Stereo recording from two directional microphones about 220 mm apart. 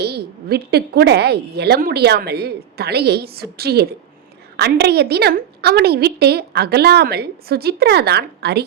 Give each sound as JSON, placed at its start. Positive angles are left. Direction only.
{"t": 0.0, "sound": "a woman's voice", "side_deg": -45}